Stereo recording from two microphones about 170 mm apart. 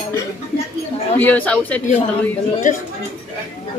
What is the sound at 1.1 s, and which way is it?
Speech, 10° left (ahead or behind).